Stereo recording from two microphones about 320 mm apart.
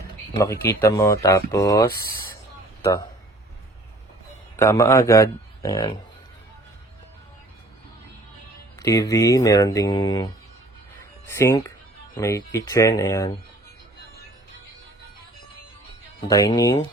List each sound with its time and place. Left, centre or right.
0.3 s speech: centre
1.9 s speech: left
4.5 s speech: centre
8.7 s speech: centre
16.2 s speech: centre